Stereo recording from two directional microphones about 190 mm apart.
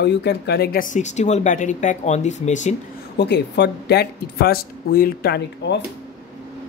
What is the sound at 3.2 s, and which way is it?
Speech, 65° left (ahead or behind).